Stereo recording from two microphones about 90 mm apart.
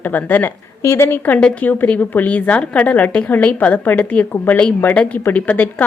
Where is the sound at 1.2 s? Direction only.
15° left (ahead or behind).